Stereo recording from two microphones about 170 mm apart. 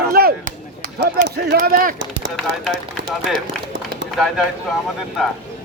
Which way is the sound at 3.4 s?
90° right.